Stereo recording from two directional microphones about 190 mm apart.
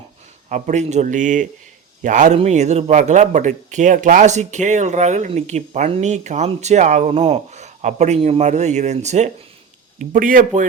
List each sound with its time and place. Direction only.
0.5 s a man's voice: 40° right (ahead or behind)